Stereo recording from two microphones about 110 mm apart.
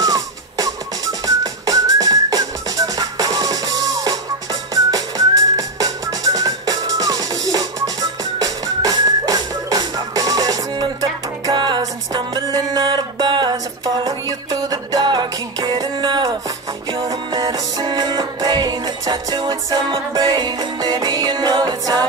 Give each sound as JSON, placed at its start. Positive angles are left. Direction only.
{"t": 0.0, "sound": "music", "side_deg": -35}
{"t": 1.2, "sound": "whistling", "side_deg": -35}
{"t": 7.5, "sound": "music", "side_deg": -35}